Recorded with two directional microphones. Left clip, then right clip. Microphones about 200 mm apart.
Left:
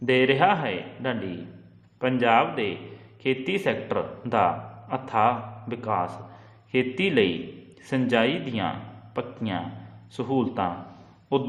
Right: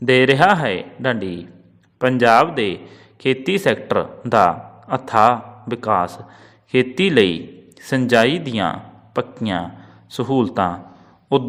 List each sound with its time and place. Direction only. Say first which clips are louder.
0.0 s a man's voice: right 7 dB; 40° right (ahead or behind)